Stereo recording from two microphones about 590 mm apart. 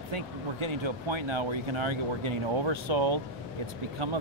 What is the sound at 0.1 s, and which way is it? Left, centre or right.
Speech, right.